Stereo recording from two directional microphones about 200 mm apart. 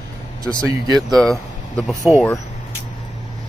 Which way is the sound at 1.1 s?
Centre (ahead or behind).